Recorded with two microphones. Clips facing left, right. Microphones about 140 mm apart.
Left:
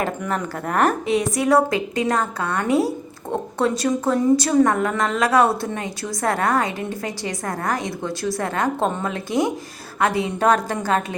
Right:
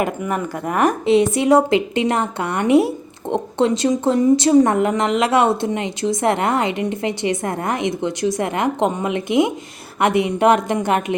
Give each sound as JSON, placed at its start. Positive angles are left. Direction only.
{"t": 0.0, "sound": "speech", "side_deg": -10}
{"t": 1.0, "sound": "a woman's voice", "side_deg": -25}